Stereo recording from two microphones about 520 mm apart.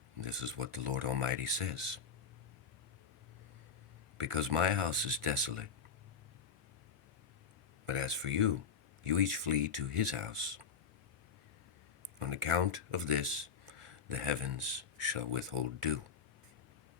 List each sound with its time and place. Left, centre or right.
0.3 s speech: right
4.2 s speech: right
7.9 s speech: right
12.2 s speech: right